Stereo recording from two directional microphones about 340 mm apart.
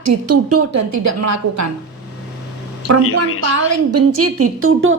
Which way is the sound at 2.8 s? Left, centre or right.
Left.